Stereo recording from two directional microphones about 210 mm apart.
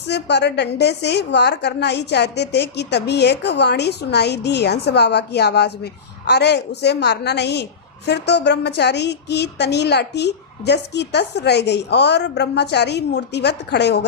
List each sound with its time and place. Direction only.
0.1 s a woman's voice: 55° left (ahead or behind)